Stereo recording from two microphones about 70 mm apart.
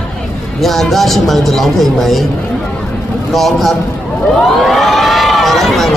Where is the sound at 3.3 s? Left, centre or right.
Centre.